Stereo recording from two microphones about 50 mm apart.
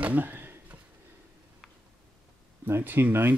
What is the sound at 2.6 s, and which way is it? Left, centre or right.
Speech, right.